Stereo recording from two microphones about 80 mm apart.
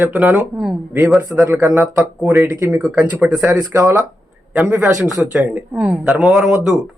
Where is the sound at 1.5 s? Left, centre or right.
Right.